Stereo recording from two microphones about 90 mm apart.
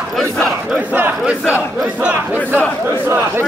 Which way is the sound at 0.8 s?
20° right (ahead or behind).